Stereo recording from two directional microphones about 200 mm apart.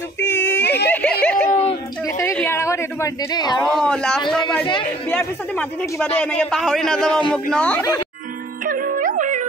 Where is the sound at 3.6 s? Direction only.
5° left (ahead or behind).